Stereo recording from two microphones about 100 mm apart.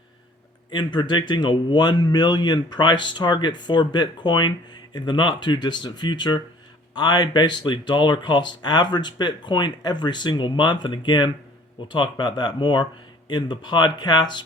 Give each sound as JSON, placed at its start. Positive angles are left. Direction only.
{"t": 0.7, "sound": "speech", "side_deg": 50}